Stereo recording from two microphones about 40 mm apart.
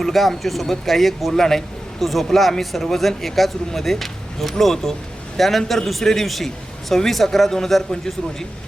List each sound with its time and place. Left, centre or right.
0.0 s a man's voice: centre